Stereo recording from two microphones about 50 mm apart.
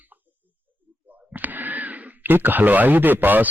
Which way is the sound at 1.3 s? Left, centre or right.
Right.